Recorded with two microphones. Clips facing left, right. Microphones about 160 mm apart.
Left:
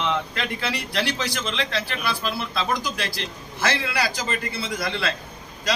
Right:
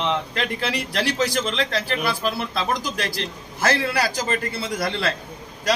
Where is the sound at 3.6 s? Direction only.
45° right (ahead or behind).